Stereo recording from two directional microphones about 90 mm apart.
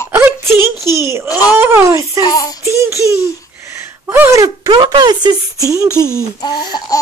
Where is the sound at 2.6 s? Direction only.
30° right (ahead or behind).